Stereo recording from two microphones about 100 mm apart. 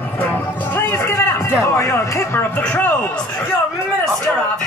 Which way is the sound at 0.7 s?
20° left (ahead or behind).